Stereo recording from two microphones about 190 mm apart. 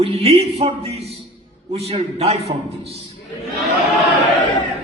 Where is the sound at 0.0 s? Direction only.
30° right (ahead or behind).